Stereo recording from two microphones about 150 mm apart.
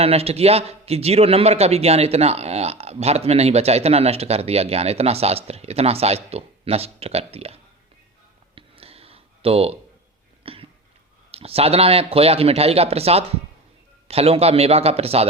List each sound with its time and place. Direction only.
0.0 s a man's voice: 40° right (ahead or behind)
8.5 s a sound: 40° right (ahead or behind)
11.3 s a man's voice: 40° right (ahead or behind)